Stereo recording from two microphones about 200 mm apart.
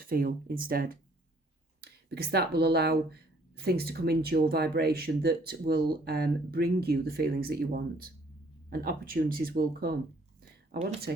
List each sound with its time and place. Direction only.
0.0 s speech: 45° right (ahead or behind)